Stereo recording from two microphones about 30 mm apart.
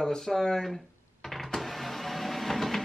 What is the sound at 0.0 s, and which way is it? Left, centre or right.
Speech, left.